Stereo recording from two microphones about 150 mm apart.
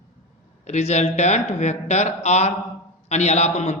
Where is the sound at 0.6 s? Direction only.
50° left (ahead or behind).